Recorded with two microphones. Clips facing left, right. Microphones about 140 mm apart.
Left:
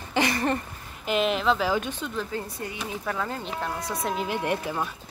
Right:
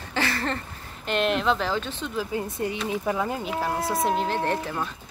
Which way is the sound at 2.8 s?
15° right (ahead or behind).